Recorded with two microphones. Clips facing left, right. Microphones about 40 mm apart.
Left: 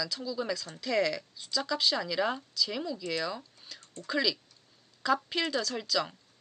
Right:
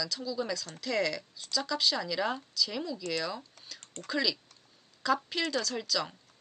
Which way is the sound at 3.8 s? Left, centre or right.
Right.